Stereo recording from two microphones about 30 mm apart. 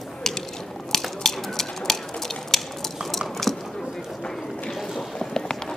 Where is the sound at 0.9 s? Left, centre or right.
Centre.